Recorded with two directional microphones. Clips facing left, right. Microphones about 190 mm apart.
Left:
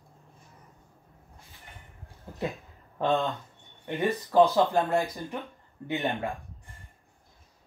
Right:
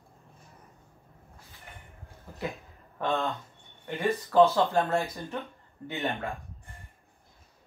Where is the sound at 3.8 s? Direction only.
15° left (ahead or behind).